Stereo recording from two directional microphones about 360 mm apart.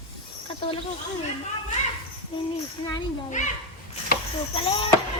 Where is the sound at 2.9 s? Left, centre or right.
Centre.